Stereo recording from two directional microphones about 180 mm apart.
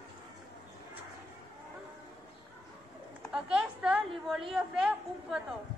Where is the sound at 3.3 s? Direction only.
5° right (ahead or behind).